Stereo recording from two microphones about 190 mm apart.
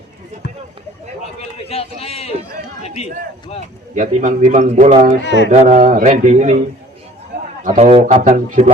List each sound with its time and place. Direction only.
1.5 s a man's voice: 30° left (ahead or behind)
3.9 s a man's voice: 40° right (ahead or behind)
7.6 s a man's voice: 40° right (ahead or behind)